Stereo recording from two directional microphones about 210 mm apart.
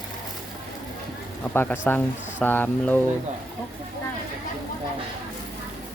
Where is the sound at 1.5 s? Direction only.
10° left (ahead or behind).